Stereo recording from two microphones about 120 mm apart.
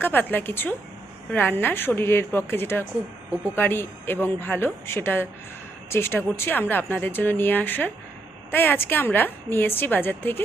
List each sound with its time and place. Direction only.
0.0 s a woman's voice: 15° left (ahead or behind)